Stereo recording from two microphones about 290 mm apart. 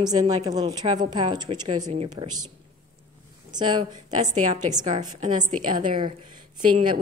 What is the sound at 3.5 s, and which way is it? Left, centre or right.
A woman's voice, centre.